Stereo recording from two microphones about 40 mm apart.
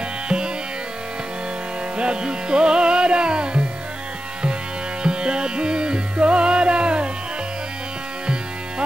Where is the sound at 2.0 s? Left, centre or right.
Right.